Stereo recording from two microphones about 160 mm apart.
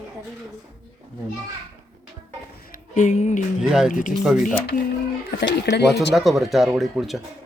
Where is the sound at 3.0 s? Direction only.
45° left (ahead or behind).